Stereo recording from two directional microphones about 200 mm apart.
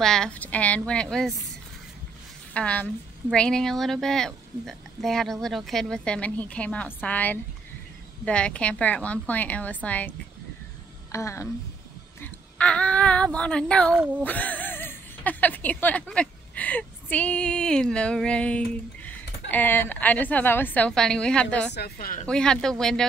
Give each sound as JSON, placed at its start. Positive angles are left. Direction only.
{"t": 0.0, "sound": "a woman's voice", "side_deg": 5}
{"t": 2.5, "sound": "a woman's voice", "side_deg": 5}
{"t": 13.9, "sound": "speech", "side_deg": -5}
{"t": 14.2, "sound": "speech", "side_deg": 10}
{"t": 21.7, "sound": "a woman's voice", "side_deg": 50}
{"t": 22.3, "sound": "a woman's voice", "side_deg": 5}